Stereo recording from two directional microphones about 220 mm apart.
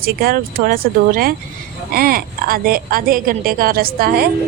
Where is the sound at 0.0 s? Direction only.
45° right (ahead or behind).